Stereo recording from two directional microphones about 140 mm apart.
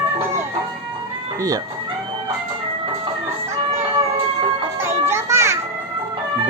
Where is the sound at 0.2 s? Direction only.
20° right (ahead or behind).